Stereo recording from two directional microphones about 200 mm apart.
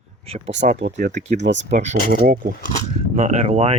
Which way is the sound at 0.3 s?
35° right (ahead or behind).